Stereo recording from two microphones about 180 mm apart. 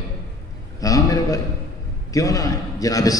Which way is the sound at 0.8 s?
20° left (ahead or behind).